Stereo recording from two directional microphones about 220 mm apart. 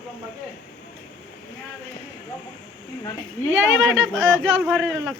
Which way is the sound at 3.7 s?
60° right (ahead or behind).